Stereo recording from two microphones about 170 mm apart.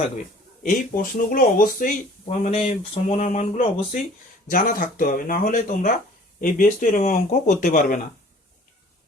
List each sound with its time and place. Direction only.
0.6 s speech: 50° left (ahead or behind)
2.2 s speech: 40° left (ahead or behind)
4.4 s speech: 55° left (ahead or behind)